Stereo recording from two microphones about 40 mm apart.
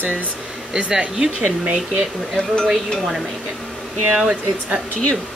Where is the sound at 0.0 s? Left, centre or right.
Right.